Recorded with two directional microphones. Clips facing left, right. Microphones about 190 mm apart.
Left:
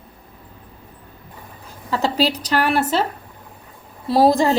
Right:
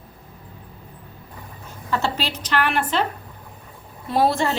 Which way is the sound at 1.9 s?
35° left (ahead or behind).